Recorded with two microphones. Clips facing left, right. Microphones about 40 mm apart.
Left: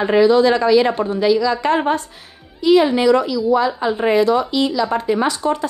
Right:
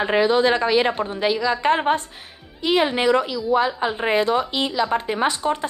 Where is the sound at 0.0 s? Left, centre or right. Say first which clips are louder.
Left 5 dB; right.